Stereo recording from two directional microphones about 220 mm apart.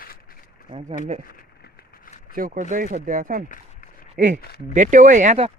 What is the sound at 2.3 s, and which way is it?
Speech, 40° right (ahead or behind).